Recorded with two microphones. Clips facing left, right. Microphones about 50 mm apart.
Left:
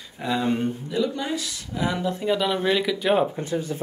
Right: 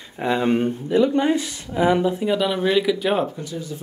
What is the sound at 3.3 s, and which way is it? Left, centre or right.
Speech, left.